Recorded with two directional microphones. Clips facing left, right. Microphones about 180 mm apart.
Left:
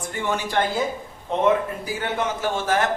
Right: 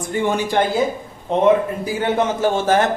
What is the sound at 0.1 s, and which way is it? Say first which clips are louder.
A man's voice: right 6 dB; 15° right (ahead or behind).